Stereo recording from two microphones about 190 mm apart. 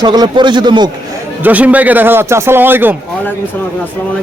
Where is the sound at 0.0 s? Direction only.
20° right (ahead or behind).